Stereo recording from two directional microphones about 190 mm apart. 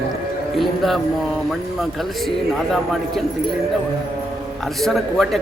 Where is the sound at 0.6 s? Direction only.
Centre (ahead or behind).